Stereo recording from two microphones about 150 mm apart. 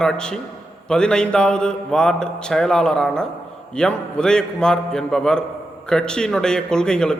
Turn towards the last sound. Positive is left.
turn(degrees=5)  # may be behind; listen again after turning